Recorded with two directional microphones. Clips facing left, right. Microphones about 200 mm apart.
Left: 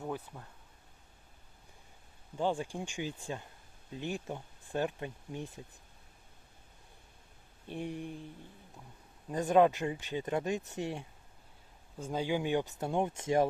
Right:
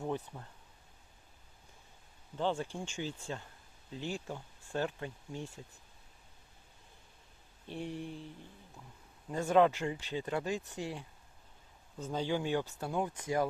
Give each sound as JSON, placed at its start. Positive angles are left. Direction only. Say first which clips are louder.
{"t": 2.3, "sound": "speech", "louder": "left 1 dB", "side_deg": 10}
{"t": 7.7, "sound": "speech", "louder": "left 1 dB", "side_deg": 15}
{"t": 9.3, "sound": "speech", "louder": "left 1 dB", "side_deg": 15}